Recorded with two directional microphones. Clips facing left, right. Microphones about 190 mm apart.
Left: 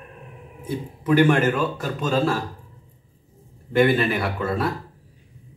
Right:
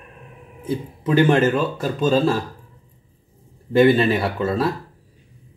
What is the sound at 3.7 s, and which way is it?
Speech, 25° right (ahead or behind).